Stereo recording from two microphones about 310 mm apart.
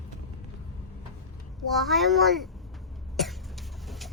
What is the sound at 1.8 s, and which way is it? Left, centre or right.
Speech, centre.